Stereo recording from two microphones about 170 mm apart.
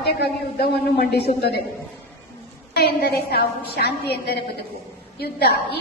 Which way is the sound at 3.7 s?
75° left (ahead or behind).